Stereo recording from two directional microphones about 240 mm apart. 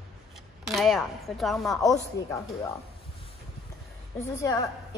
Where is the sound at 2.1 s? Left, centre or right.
Centre.